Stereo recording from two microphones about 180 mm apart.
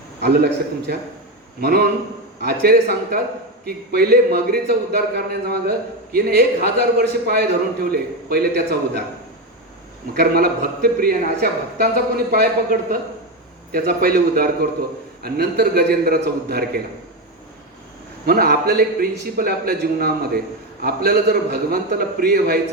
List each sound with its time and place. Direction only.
0.2 s a man's voice: 65° right (ahead or behind)
10.2 s a man's voice: 55° right (ahead or behind)
18.3 s a man's voice: 55° right (ahead or behind)